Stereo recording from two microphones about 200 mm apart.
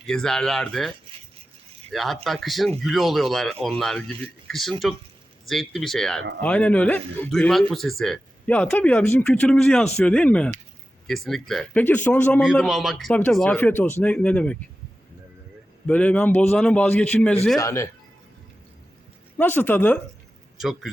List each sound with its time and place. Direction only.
0.0 s a man's voice: 5° left (ahead or behind)
12.4 s a man's voice: centre (ahead or behind)
15.9 s a man's voice: 5° left (ahead or behind)
19.4 s a man's voice: 10° left (ahead or behind)
20.6 s a man's voice: centre (ahead or behind)